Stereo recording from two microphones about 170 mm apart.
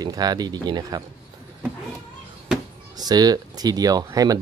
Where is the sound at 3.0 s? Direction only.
25° right (ahead or behind).